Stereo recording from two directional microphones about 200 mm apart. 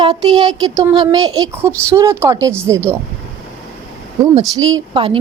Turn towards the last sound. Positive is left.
turn(degrees=-25)  # may be behind; listen again after turning